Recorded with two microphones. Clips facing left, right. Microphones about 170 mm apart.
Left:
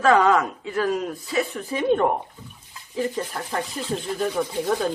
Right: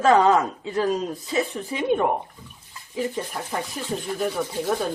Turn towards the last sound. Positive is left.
turn(degrees=-5)  # may be behind; listen again after turning